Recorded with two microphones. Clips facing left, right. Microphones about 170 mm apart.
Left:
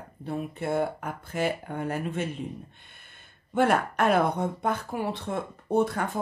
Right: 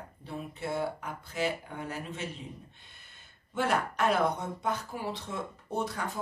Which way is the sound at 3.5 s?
55° left (ahead or behind).